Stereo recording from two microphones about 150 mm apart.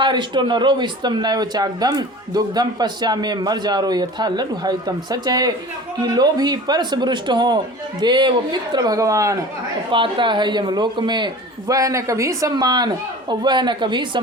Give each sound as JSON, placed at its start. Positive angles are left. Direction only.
{"t": 0.0, "sound": "speech", "side_deg": -30}
{"t": 9.9, "sound": "speech", "side_deg": -35}